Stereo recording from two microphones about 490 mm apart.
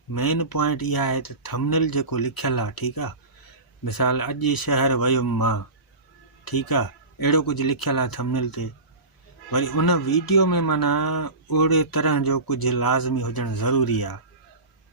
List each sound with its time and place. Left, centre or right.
0.1 s speech: left